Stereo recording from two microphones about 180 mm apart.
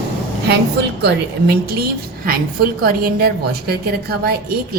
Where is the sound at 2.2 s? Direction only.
55° right (ahead or behind).